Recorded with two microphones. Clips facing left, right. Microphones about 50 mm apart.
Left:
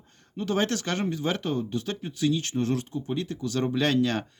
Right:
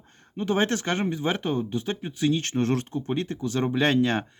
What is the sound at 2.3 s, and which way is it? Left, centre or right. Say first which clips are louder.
Speech: right 4 dB; right.